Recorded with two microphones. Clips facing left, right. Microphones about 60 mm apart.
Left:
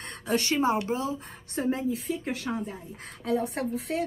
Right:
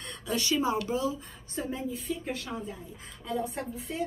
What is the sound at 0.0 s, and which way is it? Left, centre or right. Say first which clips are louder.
Speech: left 4 dB; left.